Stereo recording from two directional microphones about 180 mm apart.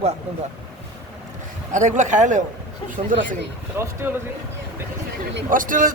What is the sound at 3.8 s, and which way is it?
Speech, 10° right (ahead or behind).